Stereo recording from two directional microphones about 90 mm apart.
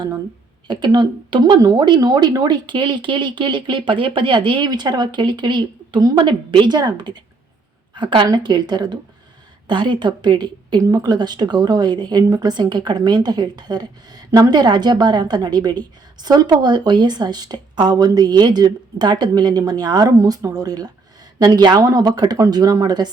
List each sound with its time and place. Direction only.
0.7 s speech: 60° right (ahead or behind)
1.5 s a woman's voice: 40° right (ahead or behind)